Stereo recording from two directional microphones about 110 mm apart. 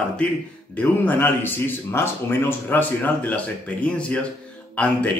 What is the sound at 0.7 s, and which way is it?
A man's voice, 15° left (ahead or behind).